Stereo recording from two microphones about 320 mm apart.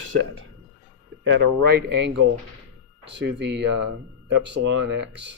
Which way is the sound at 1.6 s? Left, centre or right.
Right.